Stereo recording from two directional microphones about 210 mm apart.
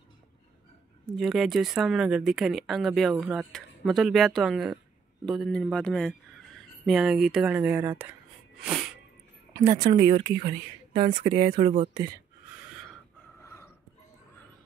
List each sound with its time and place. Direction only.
1.1 s speech: centre (ahead or behind)
9.5 s speech: 15° right (ahead or behind)
13.4 s a sound: 15° left (ahead or behind)